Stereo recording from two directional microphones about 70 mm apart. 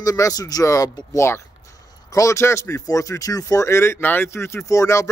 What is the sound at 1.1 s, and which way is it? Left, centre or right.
Speech, left.